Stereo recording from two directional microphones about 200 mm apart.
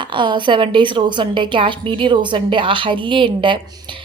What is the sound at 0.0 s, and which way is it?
Speech, 25° right (ahead or behind).